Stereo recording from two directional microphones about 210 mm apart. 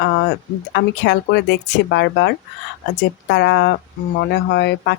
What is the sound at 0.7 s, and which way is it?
Speech, 55° left (ahead or behind).